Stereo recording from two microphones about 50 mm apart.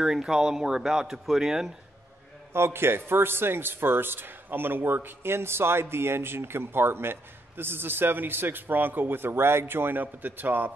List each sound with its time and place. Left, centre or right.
0.0 s speech: centre
2.5 s a man's voice: right